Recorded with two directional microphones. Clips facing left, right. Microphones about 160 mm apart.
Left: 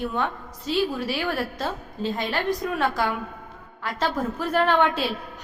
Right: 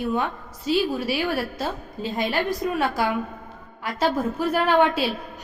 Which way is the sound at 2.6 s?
15° right (ahead or behind).